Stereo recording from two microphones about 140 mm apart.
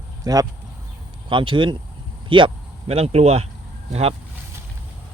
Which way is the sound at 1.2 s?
35° right (ahead or behind).